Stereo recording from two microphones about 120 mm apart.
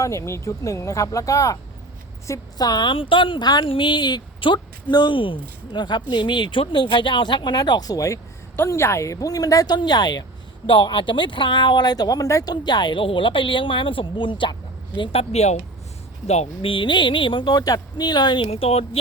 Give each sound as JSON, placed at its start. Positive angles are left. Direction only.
{"t": 0.0, "sound": "speech", "side_deg": 25}
{"t": 18.5, "sound": "speech", "side_deg": 60}